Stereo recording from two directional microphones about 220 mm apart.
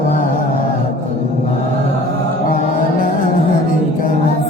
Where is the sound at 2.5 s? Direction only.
40° left (ahead or behind).